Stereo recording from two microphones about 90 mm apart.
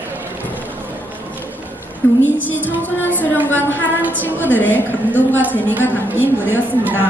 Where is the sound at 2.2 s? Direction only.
20° left (ahead or behind).